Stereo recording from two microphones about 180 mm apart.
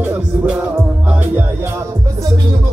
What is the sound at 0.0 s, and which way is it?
Music, 10° right (ahead or behind).